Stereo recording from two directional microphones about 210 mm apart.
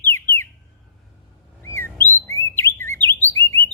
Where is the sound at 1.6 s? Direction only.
10° left (ahead or behind).